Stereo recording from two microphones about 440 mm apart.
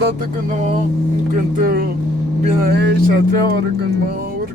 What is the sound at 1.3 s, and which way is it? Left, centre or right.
Music, right.